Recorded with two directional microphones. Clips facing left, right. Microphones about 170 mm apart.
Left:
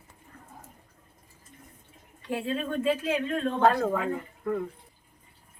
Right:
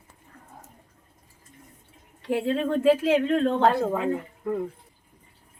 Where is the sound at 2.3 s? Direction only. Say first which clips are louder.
Right 6 dB; 75° right (ahead or behind).